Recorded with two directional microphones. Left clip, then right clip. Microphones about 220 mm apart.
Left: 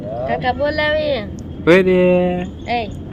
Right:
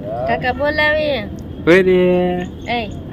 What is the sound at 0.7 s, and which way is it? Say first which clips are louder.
A man's voice: right 2 dB; 10° left (ahead or behind).